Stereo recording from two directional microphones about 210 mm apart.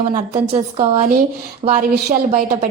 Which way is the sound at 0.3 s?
30° right (ahead or behind).